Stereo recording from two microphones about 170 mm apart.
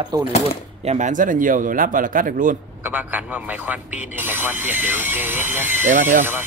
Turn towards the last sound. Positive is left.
turn(degrees=-50)  # may be behind; listen again after turning